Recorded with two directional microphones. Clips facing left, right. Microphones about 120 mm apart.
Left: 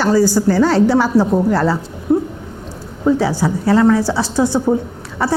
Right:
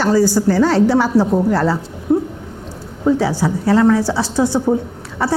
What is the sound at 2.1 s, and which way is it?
Dog, 25° left (ahead or behind).